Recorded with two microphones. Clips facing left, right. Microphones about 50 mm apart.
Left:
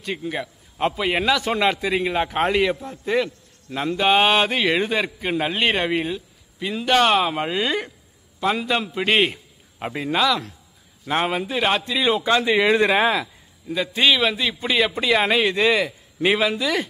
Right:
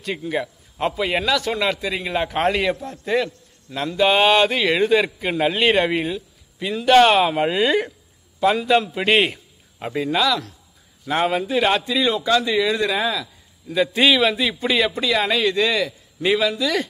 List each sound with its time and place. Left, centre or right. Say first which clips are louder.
0.0 s speech: right 3 dB; centre
0.7 s a man's voice: even; centre
1.2 s a man's voice: left 4 dB; left
2.0 s a man's voice: right 4 dB; centre
3.7 s a man's voice: right 1 dB; centre
9.8 s a man's voice: right 1 dB; centre
12.3 s speech: left 3 dB; left
13.7 s speech: right 2 dB; centre
15.0 s a man's voice: left 1 dB; left